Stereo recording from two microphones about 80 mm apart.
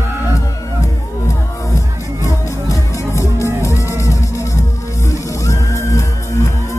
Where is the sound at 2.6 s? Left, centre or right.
Left.